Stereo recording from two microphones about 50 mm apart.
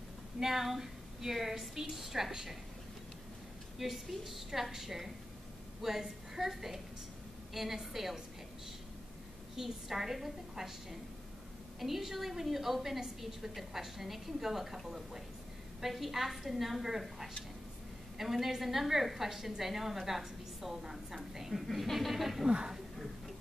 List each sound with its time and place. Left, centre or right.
0.4 s a woman's voice: centre
3.7 s a woman's voice: centre
9.6 s a woman's voice: centre
22.5 s a woman's voice: centre